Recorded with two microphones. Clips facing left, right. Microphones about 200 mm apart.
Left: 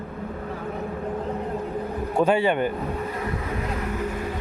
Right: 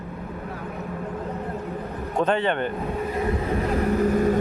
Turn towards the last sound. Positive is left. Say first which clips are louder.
# right 8 dB
turn(degrees=-40)  # may be behind; listen again after turning